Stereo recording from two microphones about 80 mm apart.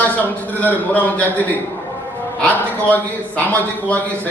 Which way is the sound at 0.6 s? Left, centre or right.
Left.